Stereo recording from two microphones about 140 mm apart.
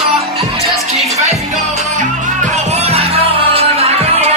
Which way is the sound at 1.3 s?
55° right (ahead or behind).